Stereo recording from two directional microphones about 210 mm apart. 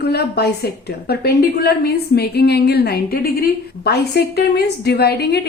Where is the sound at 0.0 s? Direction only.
50° left (ahead or behind).